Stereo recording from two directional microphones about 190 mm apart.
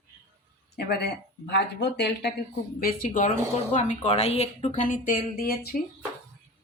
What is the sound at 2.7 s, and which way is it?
A woman's voice, 45° left (ahead or behind).